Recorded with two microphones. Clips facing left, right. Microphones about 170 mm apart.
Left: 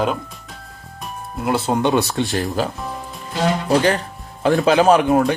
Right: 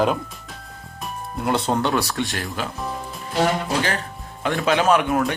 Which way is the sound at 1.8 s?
20° left (ahead or behind).